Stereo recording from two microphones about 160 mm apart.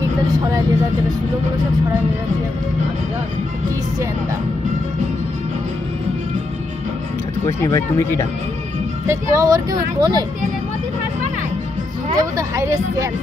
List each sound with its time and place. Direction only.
0.5 s speech: 25° right (ahead or behind)
7.4 s speech: 20° left (ahead or behind)
9.0 s speech: 20° right (ahead or behind)
12.2 s speech: 20° right (ahead or behind)